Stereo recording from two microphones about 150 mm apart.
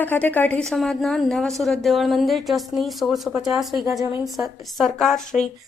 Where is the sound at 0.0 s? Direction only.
10° left (ahead or behind).